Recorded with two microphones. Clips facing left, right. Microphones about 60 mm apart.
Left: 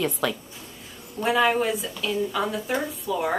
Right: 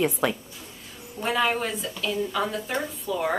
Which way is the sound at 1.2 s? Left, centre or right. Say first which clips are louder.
Left 3 dB; centre.